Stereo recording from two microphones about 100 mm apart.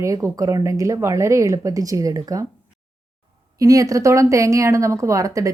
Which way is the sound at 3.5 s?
35° right (ahead or behind).